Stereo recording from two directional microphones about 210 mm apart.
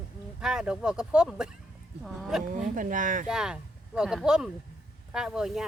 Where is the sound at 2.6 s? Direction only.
40° right (ahead or behind).